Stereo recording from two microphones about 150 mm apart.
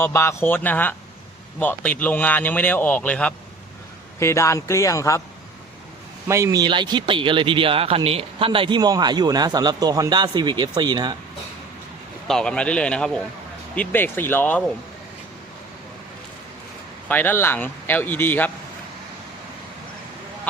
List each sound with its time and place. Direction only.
0.0 s speech: 15° left (ahead or behind)
4.2 s speech: 20° left (ahead or behind)
6.2 s a man's voice: 20° right (ahead or behind)
12.3 s a man's voice: 5° left (ahead or behind)
17.1 s speech: 15° left (ahead or behind)